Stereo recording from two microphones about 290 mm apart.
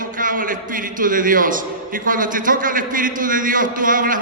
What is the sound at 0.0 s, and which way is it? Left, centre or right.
A man's voice, right.